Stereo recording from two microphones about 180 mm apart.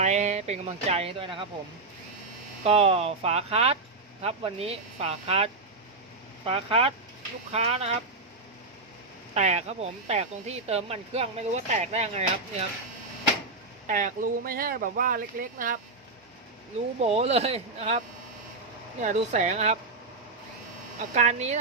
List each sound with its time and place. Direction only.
0.0 s speech: 40° right (ahead or behind)
2.6 s speech: 35° right (ahead or behind)
9.3 s speech: 35° right (ahead or behind)
13.8 s speech: 50° right (ahead or behind)
17.0 s speech: 35° right (ahead or behind)
19.0 s speech: 40° right (ahead or behind)
21.2 s speech: 40° right (ahead or behind)